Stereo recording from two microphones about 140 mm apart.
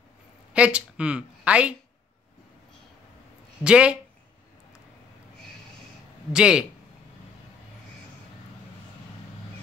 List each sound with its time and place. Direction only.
0.5 s a woman's voice: 10° right (ahead or behind)
3.6 s speech: 10° right (ahead or behind)
6.3 s speech: 5° right (ahead or behind)